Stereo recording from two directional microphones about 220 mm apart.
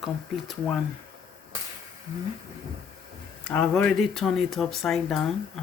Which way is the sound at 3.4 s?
5° left (ahead or behind).